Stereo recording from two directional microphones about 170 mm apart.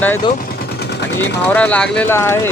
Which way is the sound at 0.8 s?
80° left.